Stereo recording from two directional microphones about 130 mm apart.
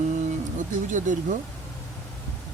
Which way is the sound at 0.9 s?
75° right (ahead or behind).